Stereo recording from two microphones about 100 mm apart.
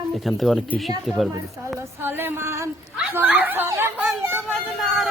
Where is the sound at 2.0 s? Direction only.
25° right (ahead or behind).